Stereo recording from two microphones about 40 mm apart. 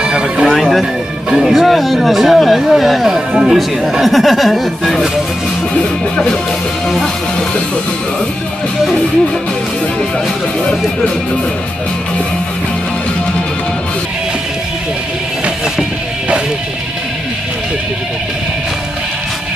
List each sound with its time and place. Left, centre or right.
0.0 s music: centre
0.5 s music: centre
1.3 s speech: centre
3.2 s speech: centre
3.9 s speech: centre
10.6 s speech: left